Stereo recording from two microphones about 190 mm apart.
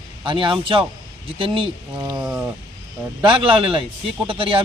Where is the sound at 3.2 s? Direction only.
25° right (ahead or behind).